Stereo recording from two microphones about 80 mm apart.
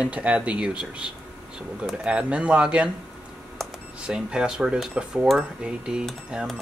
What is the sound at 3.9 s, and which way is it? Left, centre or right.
Speech, centre.